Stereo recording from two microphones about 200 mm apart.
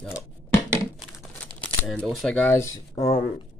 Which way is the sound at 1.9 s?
Centre (ahead or behind).